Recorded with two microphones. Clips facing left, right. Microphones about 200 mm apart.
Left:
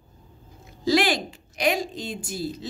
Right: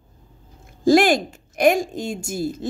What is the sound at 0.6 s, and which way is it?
Speech, 50° right (ahead or behind).